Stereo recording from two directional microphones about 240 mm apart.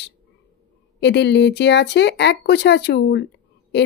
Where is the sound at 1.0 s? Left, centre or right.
Left.